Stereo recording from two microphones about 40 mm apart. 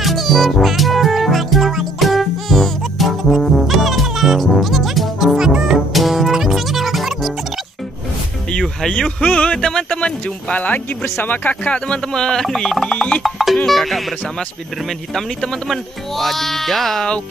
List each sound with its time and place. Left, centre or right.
0.0 s music: centre
8.5 s music: left
9.5 s speech: centre
10.5 s speech: left
11.2 s speech: left
11.6 s speech: left
12.0 s speech: centre
13.2 s music: centre
14.9 s speech: centre